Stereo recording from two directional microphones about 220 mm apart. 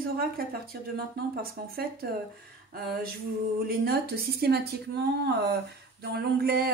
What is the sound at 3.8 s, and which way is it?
Speech, 45° right (ahead or behind).